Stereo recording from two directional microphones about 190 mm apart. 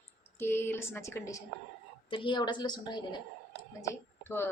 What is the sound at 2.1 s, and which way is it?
A woman's voice, 25° left (ahead or behind).